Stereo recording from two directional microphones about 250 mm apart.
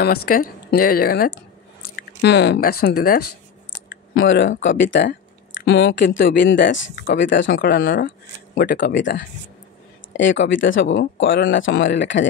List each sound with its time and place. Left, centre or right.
0.0 s speech: left
4.1 s speech: left